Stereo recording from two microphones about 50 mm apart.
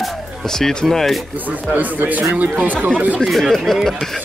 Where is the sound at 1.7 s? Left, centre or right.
Right.